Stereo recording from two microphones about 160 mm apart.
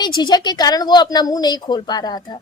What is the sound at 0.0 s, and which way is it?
A woman's voice, 25° left (ahead or behind).